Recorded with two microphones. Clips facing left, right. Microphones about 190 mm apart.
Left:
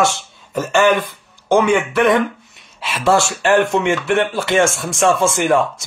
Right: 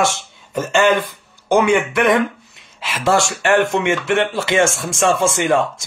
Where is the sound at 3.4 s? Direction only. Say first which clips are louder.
Left 1 dB; 65° right (ahead or behind).